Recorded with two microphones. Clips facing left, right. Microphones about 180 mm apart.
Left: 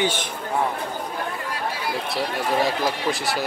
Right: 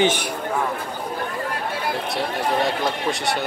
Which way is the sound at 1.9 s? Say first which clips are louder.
Right 1 dB; centre (ahead or behind).